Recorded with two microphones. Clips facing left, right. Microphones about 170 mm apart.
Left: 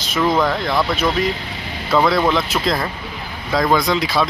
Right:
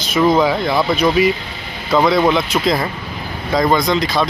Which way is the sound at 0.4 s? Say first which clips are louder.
Right 3 dB; 5° right (ahead or behind).